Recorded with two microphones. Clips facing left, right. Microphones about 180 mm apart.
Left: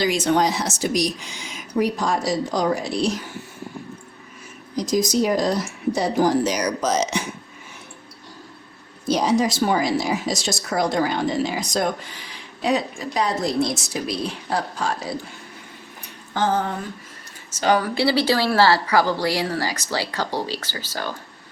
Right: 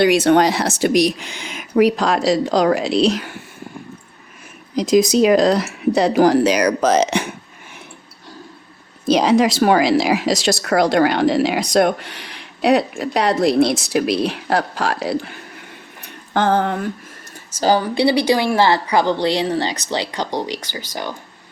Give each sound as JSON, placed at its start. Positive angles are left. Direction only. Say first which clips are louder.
{"t": 0.0, "sound": "speech", "louder": "right 6 dB", "side_deg": -65}
{"t": 4.8, "sound": "speech", "louder": "right 7 dB", "side_deg": -75}
{"t": 9.1, "sound": "speech", "louder": "right 5 dB", "side_deg": -75}
{"t": 16.3, "sound": "a sound", "louder": "right 5 dB", "side_deg": -60}
{"t": 17.6, "sound": "a woman's voice", "louder": "right 4 dB", "side_deg": -30}